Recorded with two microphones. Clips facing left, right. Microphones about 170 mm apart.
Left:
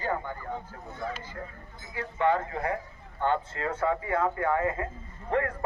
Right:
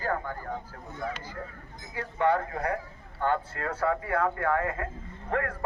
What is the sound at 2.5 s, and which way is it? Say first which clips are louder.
Speech: even; 5° left (ahead or behind).